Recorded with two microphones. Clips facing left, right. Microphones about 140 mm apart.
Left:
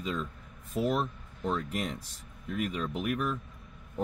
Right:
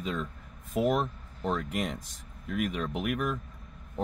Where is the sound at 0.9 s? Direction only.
40° right (ahead or behind).